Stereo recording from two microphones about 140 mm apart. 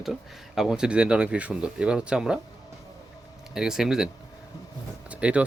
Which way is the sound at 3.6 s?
5° right (ahead or behind).